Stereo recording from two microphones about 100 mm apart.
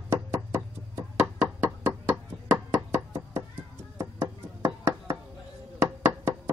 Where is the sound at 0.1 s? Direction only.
25° right (ahead or behind).